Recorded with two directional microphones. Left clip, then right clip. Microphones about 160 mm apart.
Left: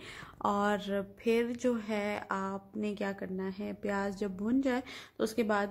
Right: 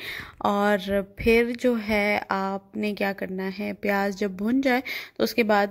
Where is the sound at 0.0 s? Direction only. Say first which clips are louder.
Right 8 dB; 35° right (ahead or behind).